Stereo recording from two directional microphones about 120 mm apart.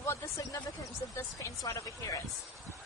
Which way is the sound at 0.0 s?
25° left (ahead or behind).